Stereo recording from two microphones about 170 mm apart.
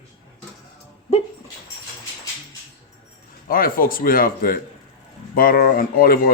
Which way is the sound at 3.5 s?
55° left (ahead or behind).